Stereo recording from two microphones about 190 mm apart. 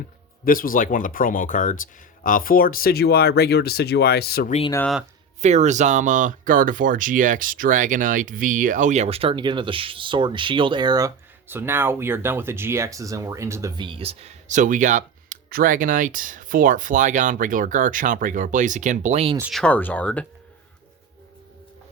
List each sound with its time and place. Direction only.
0.4 s speech: 50° left (ahead or behind)
5.4 s speech: 35° right (ahead or behind)
19.4 s speech: centre (ahead or behind)